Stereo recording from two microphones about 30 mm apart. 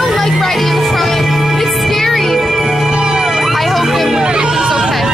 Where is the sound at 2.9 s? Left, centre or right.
Right.